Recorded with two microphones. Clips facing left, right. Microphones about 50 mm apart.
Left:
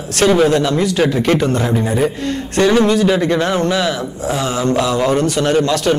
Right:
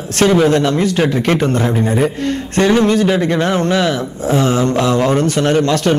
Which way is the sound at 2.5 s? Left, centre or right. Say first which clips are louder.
Even; right.